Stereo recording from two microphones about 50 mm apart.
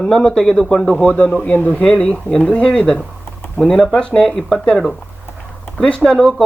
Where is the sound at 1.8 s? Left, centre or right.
Centre.